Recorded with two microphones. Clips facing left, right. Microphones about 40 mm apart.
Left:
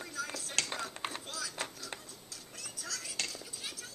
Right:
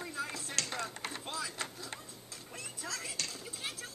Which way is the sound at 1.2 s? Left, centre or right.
Right.